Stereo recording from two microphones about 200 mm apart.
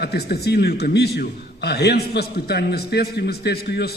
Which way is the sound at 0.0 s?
50° left (ahead or behind).